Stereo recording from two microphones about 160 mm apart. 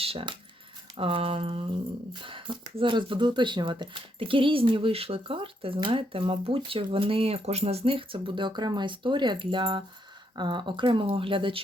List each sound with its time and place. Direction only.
0.0 s speech: 35° right (ahead or behind)